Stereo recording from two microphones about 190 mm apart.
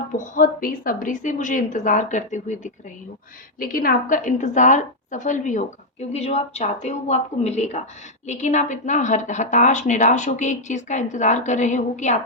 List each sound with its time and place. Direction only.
0.1 s a woman's voice: 45° left (ahead or behind)